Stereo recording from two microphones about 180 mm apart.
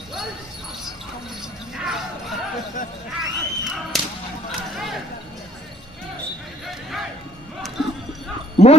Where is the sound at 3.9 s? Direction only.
Centre (ahead or behind).